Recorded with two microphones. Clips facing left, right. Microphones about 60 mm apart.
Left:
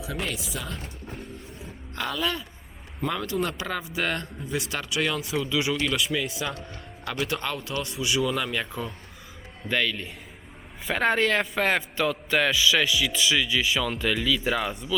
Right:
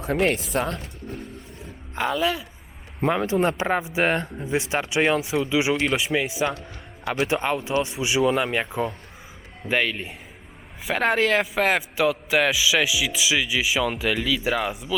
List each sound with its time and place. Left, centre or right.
0.3 s speech: right
2.0 s a man's voice: centre
3.0 s a man's voice: right; by 10.2 s centre
10.8 s a man's voice: centre